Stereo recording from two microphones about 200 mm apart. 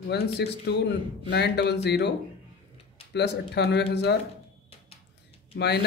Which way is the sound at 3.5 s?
55° left (ahead or behind).